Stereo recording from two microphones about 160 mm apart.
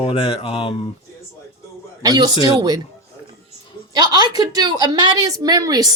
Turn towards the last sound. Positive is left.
turn(degrees=-25)  # may be behind; listen again after turning